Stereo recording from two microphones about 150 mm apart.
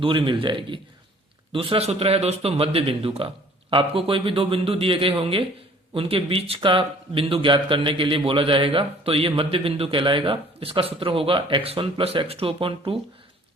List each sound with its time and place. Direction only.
0.0 s speech: 35° right (ahead or behind)